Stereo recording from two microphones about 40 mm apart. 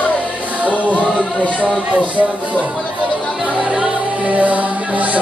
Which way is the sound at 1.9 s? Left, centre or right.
Right.